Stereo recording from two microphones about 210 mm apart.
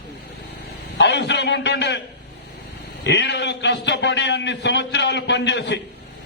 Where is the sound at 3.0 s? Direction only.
55° left (ahead or behind).